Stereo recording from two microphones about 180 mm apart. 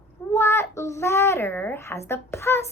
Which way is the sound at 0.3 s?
15° left (ahead or behind).